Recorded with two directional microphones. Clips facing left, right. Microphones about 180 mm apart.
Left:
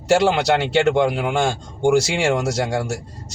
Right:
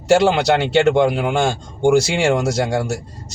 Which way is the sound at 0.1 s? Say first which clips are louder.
Right 2 dB; 25° right (ahead or behind).